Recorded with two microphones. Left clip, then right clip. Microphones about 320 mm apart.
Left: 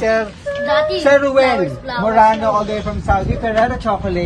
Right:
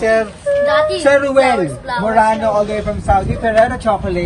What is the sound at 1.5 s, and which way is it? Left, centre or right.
Speech, right.